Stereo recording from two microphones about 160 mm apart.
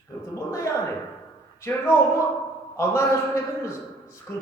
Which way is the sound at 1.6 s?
15° left (ahead or behind).